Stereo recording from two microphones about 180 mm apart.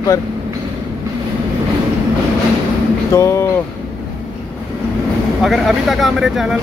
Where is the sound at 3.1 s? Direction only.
15° left (ahead or behind).